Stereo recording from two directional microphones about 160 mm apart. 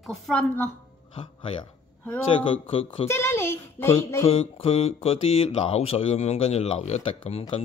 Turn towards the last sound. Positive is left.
turn(degrees=40)  # may be behind; listen again after turning